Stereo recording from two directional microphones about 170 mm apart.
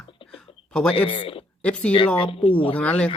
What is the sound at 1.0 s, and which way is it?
Speech, 30° left (ahead or behind).